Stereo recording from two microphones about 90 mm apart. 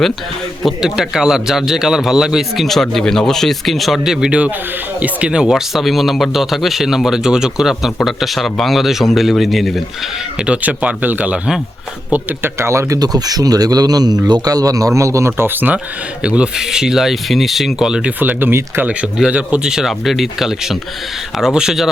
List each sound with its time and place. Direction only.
0.6 s speech: 5° right (ahead or behind)
10.4 s speech: 15° right (ahead or behind)
12.1 s speech: 25° right (ahead or behind)
13.0 s speech: 45° right (ahead or behind); by 18.1 s 10° right (ahead or behind)
18.2 s speech: 20° right (ahead or behind); by 21.8 s 5° right (ahead or behind)